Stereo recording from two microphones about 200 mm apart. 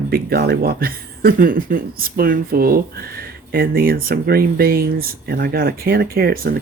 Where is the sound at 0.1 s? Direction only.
50° right (ahead or behind).